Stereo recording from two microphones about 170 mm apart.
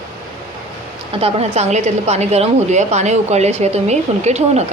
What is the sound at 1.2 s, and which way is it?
A woman's voice, 40° right (ahead or behind).